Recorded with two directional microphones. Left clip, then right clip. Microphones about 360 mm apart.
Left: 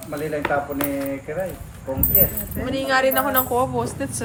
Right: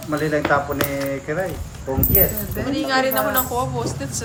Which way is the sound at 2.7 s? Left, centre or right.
Left.